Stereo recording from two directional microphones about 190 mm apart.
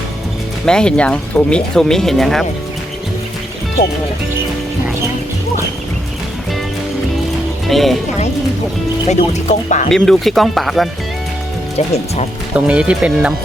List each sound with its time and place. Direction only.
0.6 s speech: 5° left (ahead or behind)
7.7 s speech: centre (ahead or behind)
9.0 s speech: 35° left (ahead or behind)
9.9 s speech: centre (ahead or behind)
12.5 s speech: 5° right (ahead or behind)